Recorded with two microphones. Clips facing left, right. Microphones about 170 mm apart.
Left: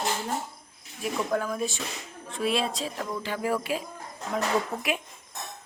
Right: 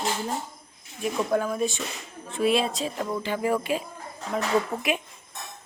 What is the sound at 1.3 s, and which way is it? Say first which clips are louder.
Speech: right 4 dB; 5° right (ahead or behind).